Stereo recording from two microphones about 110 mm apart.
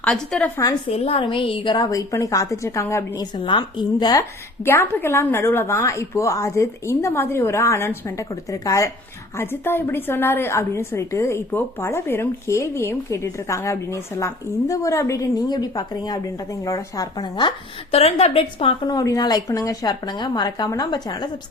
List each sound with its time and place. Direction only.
0.0 s a woman's voice: 5° left (ahead or behind)
0.9 s a woman's voice: 65° left (ahead or behind); by 1.9 s 45° left (ahead or behind)
1.9 s a woman's voice: 30° left (ahead or behind)
3.2 s a woman's voice: 45° left (ahead or behind)
4.2 s a woman's voice: 20° left (ahead or behind); by 17.5 s 40° left (ahead or behind)
17.9 s a woman's voice: 65° left (ahead or behind)
18.9 s speech: 35° left (ahead or behind)